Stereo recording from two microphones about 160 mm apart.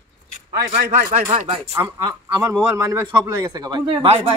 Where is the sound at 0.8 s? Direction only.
55° right (ahead or behind).